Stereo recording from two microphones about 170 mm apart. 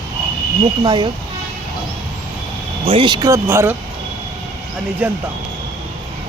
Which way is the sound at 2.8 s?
30° right (ahead or behind).